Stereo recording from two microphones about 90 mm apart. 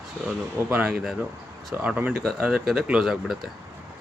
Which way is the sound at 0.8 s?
5° right (ahead or behind).